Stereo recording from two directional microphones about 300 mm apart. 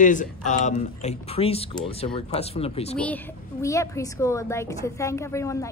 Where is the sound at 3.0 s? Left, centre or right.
Centre.